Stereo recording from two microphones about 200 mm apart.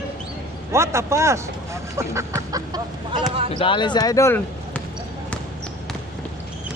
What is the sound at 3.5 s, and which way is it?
Speech, 25° left (ahead or behind).